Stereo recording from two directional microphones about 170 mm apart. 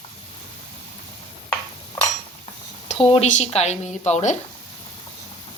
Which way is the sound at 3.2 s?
40° left (ahead or behind).